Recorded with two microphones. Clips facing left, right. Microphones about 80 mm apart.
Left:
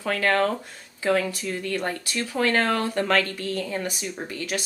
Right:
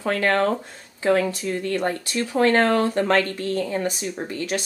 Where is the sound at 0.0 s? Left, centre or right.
Centre.